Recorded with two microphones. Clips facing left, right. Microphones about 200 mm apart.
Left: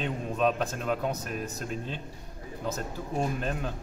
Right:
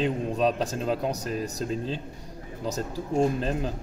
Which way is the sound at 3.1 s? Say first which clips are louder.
Right 6 dB; 30° right (ahead or behind).